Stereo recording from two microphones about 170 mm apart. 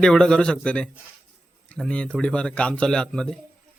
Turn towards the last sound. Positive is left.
turn(degrees=5)  # may be behind; listen again after turning